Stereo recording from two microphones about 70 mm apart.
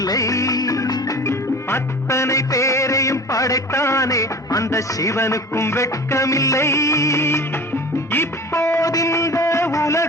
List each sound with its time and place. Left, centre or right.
0.0 s music: left
1.2 s music: left
8.9 s a sound: left